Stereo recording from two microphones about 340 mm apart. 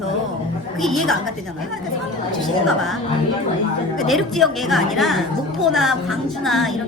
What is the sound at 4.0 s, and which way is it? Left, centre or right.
A woman's voice, centre.